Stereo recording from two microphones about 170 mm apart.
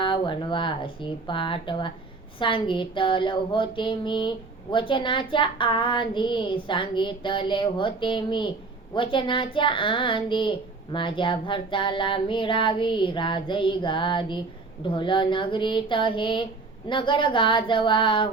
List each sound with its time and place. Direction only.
0.0 s speech: 30° left (ahead or behind)